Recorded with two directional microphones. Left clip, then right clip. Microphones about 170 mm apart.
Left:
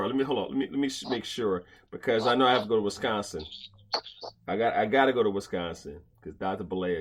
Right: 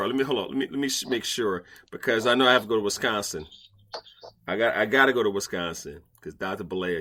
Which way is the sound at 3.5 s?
25° left (ahead or behind).